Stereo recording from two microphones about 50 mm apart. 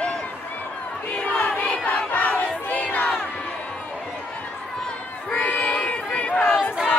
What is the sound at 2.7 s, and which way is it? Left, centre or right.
Crowd, left.